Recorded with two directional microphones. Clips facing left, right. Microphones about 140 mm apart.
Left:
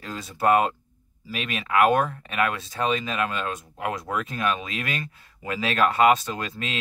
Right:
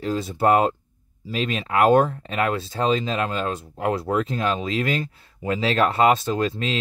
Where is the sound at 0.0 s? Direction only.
25° right (ahead or behind).